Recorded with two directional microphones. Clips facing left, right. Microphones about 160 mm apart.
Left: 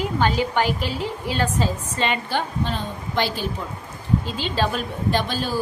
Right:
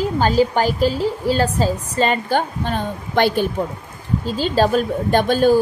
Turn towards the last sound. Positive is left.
turn(degrees=-50)  # may be behind; listen again after turning